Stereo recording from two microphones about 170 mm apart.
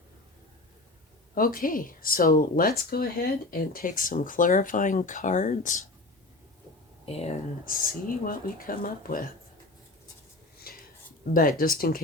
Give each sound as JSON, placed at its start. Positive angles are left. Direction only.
{"t": 1.4, "sound": "speech", "side_deg": 55}
{"t": 7.0, "sound": "speech", "side_deg": 35}
{"t": 7.6, "sound": "speech", "side_deg": 55}
{"t": 10.7, "sound": "a sound", "side_deg": 60}
{"t": 11.6, "sound": "speech", "side_deg": 60}